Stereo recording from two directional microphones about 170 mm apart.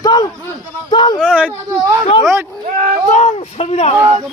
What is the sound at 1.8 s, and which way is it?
Speech, 20° right (ahead or behind).